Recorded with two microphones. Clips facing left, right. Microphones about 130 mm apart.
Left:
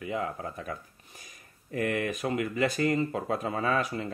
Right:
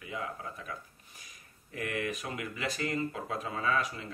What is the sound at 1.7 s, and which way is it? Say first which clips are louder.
Speech: left 6 dB; 45° left (ahead or behind).